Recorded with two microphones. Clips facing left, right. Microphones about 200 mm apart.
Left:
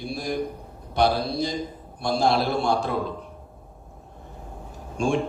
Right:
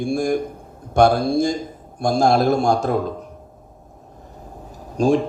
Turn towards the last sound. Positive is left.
turn(degrees=-40)  # may be behind; listen again after turning